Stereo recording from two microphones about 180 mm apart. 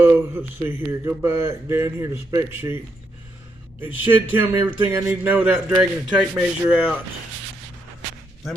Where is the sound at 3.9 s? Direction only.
90° left.